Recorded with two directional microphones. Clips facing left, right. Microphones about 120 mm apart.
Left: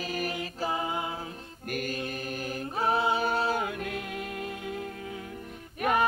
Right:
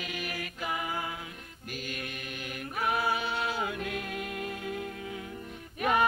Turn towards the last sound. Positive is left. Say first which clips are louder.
# left 1 dB
turn(degrees=50)  # may be behind; listen again after turning